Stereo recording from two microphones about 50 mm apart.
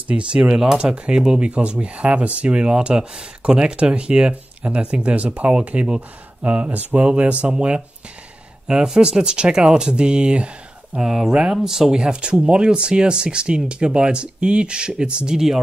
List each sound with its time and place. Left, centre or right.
0.1 s speech: right
11.0 s speech: centre